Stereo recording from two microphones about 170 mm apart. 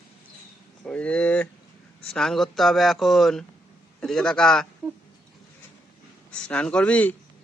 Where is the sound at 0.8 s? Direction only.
5° left (ahead or behind).